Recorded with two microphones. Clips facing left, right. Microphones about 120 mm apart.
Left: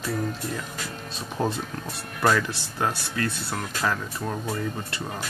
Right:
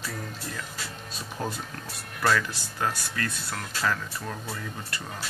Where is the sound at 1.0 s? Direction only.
25° left (ahead or behind).